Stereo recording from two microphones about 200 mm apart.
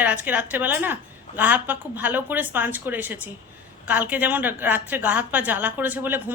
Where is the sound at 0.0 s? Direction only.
10° right (ahead or behind).